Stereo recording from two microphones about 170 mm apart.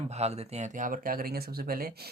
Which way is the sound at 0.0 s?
40° right (ahead or behind).